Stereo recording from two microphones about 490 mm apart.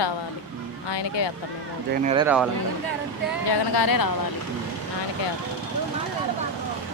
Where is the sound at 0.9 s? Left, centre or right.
Left.